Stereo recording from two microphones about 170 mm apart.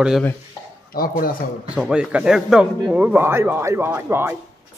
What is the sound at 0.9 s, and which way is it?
Speech, 55° left (ahead or behind).